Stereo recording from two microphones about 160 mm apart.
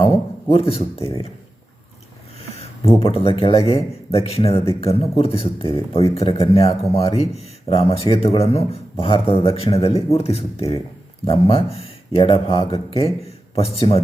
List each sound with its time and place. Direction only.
0.5 s speech: 35° left (ahead or behind)
2.6 s a sound: 35° left (ahead or behind)
3.2 s speech: 35° left (ahead or behind)
3.6 s speech: 20° left (ahead or behind)
4.1 s speech: 40° left (ahead or behind)